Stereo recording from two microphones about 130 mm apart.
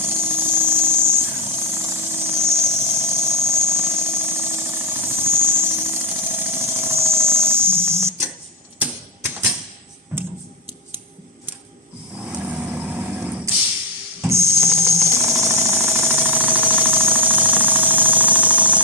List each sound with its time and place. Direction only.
0.0 s jackhammer: 15° right (ahead or behind)
8.8 s typewriter: 10° right (ahead or behind)
12.2 s vehicle: 10° right (ahead or behind)
14.2 s a sound: 20° right (ahead or behind)